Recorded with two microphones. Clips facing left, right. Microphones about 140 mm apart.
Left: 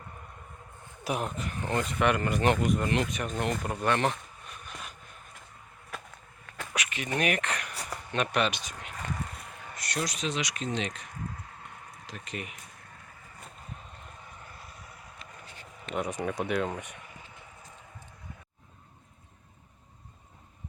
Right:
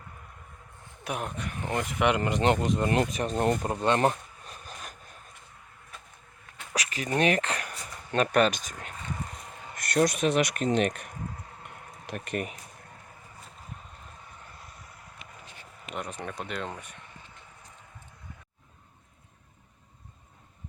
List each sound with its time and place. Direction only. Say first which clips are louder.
1.0 s speech: left 2 dB; centre (ahead or behind); by 2.9 s 25° right (ahead or behind)
3.1 s speech: right 5 dB; 35° right (ahead or behind)
3.6 s speech: right 3 dB; 25° right (ahead or behind)
4.0 s a sound: right 4 dB; 35° right (ahead or behind)
6.7 s a sound: right 4 dB; 35° right (ahead or behind)
8.1 s speech: right 5 dB; 40° right (ahead or behind)
14.6 s vehicle: left 1 dB; centre (ahead or behind)
16.0 s speech: left 5 dB; 10° left (ahead or behind)